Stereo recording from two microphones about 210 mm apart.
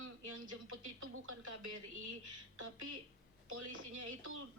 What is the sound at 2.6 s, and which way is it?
Speech, 80° right.